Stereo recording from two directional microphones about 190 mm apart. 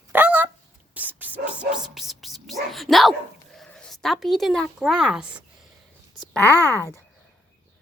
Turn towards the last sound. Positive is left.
turn(degrees=15)  # may be behind; listen again after turning